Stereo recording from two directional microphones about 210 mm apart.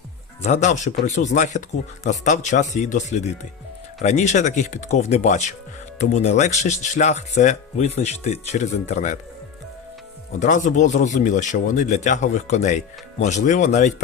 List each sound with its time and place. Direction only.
0.4 s speech: 35° left (ahead or behind)
10.4 s speech: 35° left (ahead or behind)